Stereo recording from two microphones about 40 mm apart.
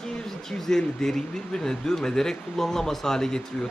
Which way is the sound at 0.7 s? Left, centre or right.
Centre.